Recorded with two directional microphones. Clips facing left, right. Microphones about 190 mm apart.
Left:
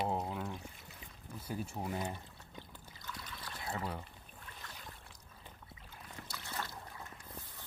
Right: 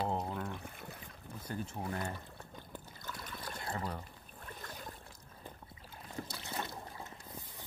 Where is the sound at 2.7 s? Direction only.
50° right (ahead or behind).